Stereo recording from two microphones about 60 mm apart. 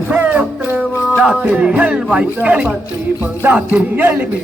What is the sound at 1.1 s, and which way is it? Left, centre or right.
Music, centre.